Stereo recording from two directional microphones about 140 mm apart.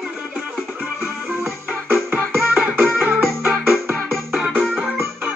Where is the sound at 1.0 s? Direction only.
15° right (ahead or behind).